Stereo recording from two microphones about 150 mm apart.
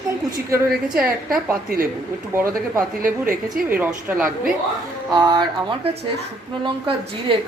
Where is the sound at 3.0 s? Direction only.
65° right (ahead or behind).